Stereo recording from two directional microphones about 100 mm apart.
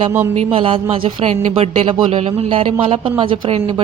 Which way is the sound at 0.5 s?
60° right (ahead or behind).